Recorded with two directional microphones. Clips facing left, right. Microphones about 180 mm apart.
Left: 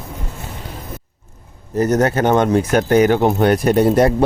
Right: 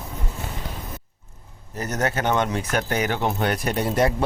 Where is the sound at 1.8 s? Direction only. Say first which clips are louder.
Left 10 dB; 40° left (ahead or behind).